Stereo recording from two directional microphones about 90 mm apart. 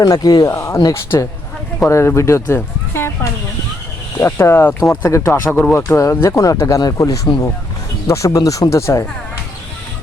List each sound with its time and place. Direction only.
0.0 s speech: 45° left (ahead or behind)
0.5 s speech: 30° left (ahead or behind)
2.9 s a sound: 30° left (ahead or behind)
4.2 s speech: 35° left (ahead or behind)
4.8 s speech: 40° left (ahead or behind)